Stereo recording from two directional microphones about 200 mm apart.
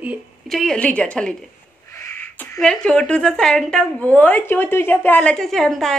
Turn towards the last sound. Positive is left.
turn(degrees=0)  # may be behind; listen again after turning